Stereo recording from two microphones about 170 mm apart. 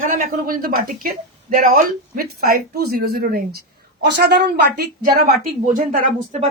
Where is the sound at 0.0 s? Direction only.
50° right (ahead or behind).